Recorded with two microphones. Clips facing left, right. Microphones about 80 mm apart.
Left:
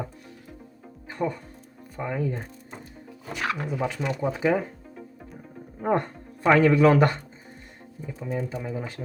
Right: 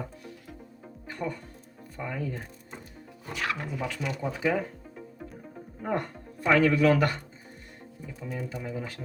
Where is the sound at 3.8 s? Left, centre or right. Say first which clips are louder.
Left 5 dB; left.